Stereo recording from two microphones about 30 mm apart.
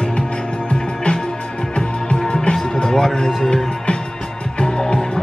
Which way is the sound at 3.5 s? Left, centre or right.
Left.